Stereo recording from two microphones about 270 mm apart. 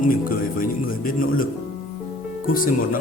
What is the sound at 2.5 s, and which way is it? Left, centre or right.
Speech, left.